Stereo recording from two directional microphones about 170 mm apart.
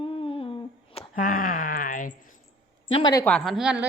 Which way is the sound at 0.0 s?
35° left (ahead or behind).